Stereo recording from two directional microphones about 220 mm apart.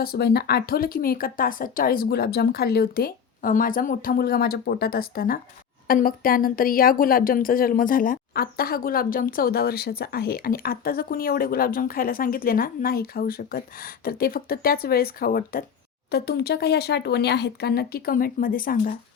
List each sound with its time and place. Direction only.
0.0 s a woman's voice: 45° left (ahead or behind)